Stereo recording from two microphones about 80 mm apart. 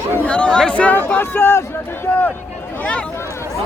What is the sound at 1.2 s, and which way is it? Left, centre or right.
Speech, left.